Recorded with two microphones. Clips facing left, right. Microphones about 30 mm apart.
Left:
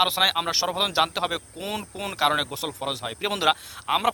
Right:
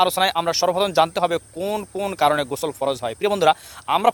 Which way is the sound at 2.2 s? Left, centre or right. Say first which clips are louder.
Right 4 dB; centre.